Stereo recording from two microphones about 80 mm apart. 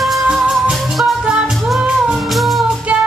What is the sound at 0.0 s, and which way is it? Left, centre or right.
Music, centre.